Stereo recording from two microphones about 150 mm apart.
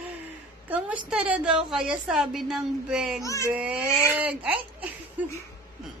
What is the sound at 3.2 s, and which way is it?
Speech, 20° left (ahead or behind).